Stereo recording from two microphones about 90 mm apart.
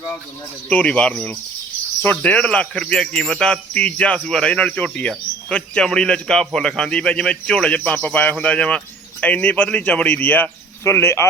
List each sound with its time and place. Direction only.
0.7 s speech: 15° left (ahead or behind)